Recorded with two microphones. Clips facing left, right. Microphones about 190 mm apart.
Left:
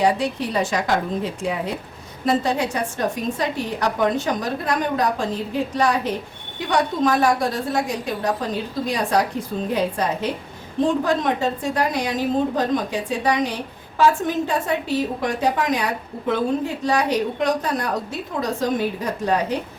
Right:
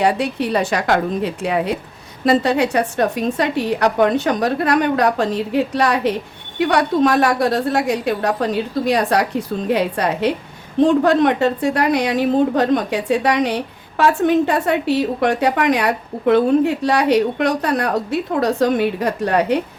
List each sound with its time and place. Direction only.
0.0 s a woman's voice: 65° right (ahead or behind)